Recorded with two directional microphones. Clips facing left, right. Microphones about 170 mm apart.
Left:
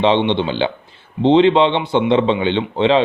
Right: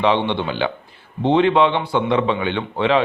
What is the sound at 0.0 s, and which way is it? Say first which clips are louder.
A man's voice: left 3 dB; 25° left (ahead or behind).